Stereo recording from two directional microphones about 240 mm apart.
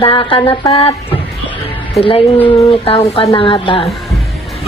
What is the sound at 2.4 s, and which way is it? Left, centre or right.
A woman's voice, left.